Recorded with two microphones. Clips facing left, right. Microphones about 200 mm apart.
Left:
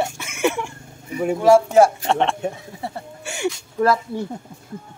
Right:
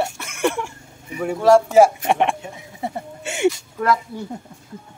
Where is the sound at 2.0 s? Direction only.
15° right (ahead or behind).